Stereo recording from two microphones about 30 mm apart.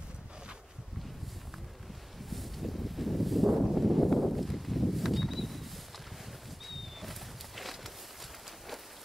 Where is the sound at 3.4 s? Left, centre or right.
Centre.